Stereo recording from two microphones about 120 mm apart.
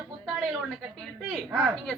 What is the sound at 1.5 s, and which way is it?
Speech, 5° right (ahead or behind).